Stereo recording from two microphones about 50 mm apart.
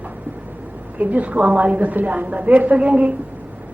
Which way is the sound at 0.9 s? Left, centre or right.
Right.